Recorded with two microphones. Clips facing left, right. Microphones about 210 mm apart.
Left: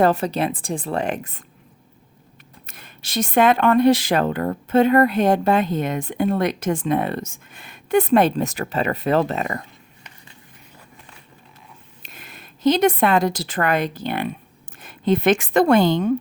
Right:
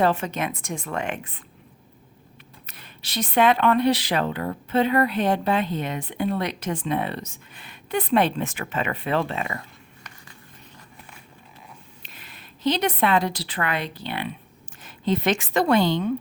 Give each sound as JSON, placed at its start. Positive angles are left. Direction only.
{"t": 0.0, "sound": "a woman's voice", "side_deg": 40}
{"t": 2.6, "sound": "speech", "side_deg": 45}
{"t": 12.0, "sound": "a woman's voice", "side_deg": 45}